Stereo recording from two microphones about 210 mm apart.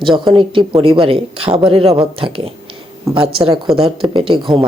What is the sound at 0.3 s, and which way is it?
A woman's voice, 25° right (ahead or behind).